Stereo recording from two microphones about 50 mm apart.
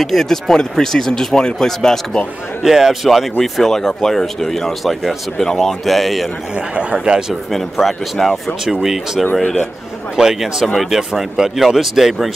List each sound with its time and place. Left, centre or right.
0.0 s speech: centre
2.6 s a man's voice: centre
3.5 s speech: centre
6.7 s speech: right
7.5 s speech: centre
8.6 s a man's voice: centre